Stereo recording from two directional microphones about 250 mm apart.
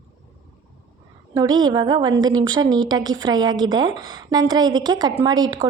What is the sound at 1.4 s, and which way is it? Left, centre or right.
Speech, centre.